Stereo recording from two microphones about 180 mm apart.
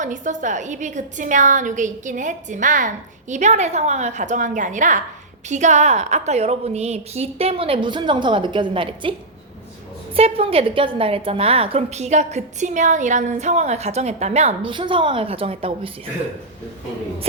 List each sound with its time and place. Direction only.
0.0 s a woman's voice: 45° right (ahead or behind); by 9.1 s 30° right (ahead or behind)
10.2 s a woman's voice: 35° right (ahead or behind)